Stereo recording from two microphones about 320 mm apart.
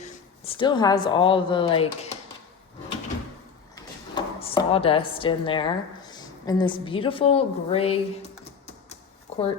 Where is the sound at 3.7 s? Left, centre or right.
Centre.